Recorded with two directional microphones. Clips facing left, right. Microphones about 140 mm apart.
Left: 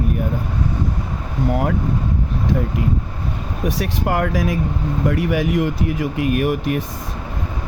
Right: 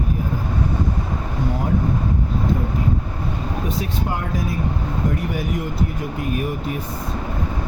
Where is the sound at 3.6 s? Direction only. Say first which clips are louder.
Left 7 dB; 80° left.